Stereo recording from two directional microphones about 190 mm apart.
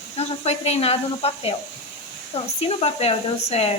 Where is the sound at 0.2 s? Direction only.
35° left (ahead or behind).